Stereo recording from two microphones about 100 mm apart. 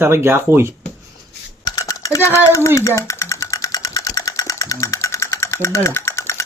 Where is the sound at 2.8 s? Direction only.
30° left (ahead or behind).